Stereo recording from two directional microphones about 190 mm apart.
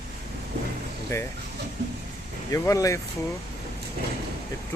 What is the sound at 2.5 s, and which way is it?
Speech, 15° left (ahead or behind).